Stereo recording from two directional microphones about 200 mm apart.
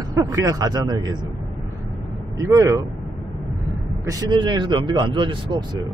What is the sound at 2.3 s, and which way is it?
Speech, 15° right (ahead or behind).